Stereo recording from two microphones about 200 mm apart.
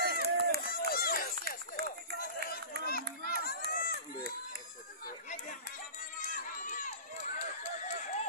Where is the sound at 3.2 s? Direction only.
50° left (ahead or behind).